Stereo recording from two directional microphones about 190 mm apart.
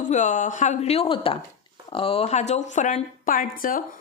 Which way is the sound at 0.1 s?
40° left (ahead or behind).